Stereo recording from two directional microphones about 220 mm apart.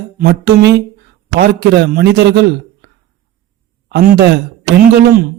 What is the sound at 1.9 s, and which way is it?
Speech, 50° right (ahead or behind).